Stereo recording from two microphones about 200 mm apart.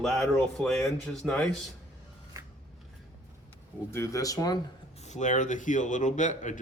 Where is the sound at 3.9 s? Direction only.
15° left (ahead or behind).